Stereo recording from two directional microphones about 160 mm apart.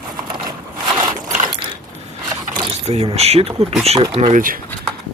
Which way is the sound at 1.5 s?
30° right (ahead or behind).